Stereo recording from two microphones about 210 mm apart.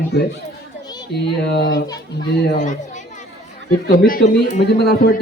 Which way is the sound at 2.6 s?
35° left (ahead or behind).